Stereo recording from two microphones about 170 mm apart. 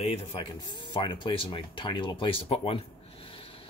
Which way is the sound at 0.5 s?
25° left (ahead or behind).